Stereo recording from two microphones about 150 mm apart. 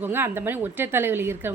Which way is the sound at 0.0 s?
15° right (ahead or behind).